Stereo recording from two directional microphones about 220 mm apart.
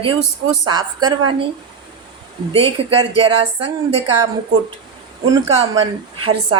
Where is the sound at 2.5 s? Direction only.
25° right (ahead or behind).